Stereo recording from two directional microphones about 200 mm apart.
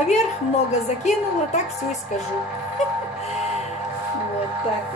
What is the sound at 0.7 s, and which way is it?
Speech, 35° left (ahead or behind).